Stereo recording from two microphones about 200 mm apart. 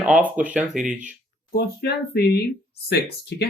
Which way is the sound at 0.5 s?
5° right (ahead or behind).